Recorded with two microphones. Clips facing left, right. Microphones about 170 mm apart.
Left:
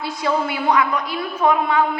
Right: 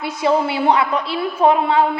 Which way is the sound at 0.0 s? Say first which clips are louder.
Right 4 dB; 25° right (ahead or behind).